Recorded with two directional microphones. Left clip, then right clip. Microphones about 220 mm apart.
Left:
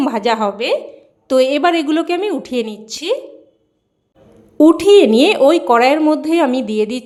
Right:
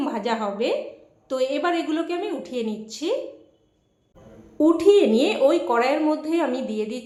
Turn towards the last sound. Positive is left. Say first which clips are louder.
# left 9 dB
turn(degrees=45)  # may be behind; listen again after turning